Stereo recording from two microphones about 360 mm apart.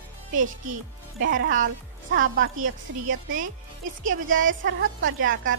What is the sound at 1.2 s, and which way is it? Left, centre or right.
A woman's voice, right.